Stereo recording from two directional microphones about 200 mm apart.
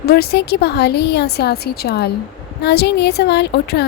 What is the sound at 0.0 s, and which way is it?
A woman's voice, 50° left (ahead or behind).